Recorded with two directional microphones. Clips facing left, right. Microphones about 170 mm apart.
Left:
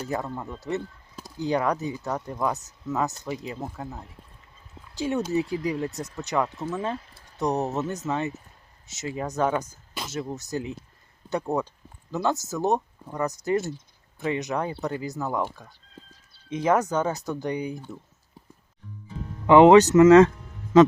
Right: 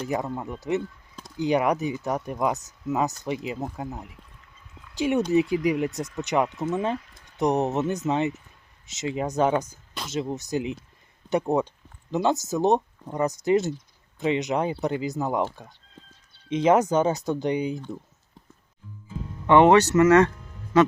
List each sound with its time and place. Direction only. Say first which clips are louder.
0.1 s speech: right 2 dB; 15° right (ahead or behind)
16.5 s speech: right 3 dB; 20° right (ahead or behind)
19.5 s speech: left 3 dB; 15° left (ahead or behind)